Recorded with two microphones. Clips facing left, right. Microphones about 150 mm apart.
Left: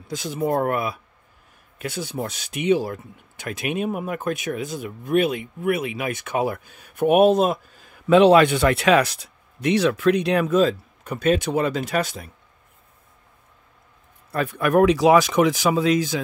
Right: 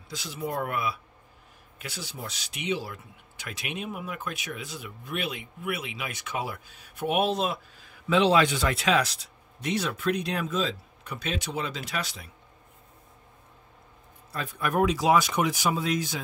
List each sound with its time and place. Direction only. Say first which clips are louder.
0.1 s speech: left 9 dB; 50° left (ahead or behind)
14.3 s speech: left 9 dB; 65° left (ahead or behind); by 16.2 s 90° left